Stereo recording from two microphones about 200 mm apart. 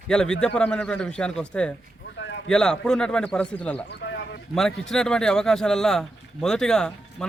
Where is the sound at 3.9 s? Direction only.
60° left (ahead or behind).